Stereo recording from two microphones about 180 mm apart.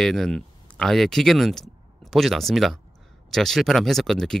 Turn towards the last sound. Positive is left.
turn(degrees=0)  # may be behind; listen again after turning